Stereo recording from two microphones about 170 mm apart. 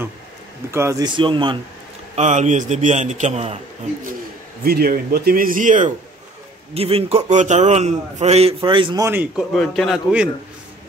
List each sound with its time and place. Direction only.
0.7 s a man's voice: 15° right (ahead or behind)
2.1 s a man's voice: 45° right (ahead or behind)
4.6 s a man's voice: 60° right (ahead or behind)
6.7 s a man's voice: 35° right (ahead or behind)
9.0 s a man's voice: 10° right (ahead or behind)